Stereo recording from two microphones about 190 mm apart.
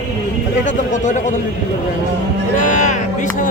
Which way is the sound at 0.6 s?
40° left (ahead or behind).